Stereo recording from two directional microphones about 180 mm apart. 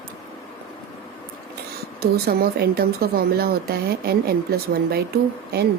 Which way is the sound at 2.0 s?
60° right (ahead or behind).